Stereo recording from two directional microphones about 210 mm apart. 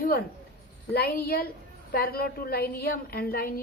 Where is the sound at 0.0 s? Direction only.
45° left (ahead or behind).